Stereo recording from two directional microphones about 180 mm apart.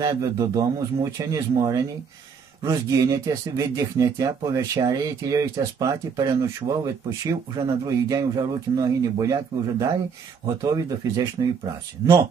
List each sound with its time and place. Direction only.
0.0 s speech: 20° right (ahead or behind)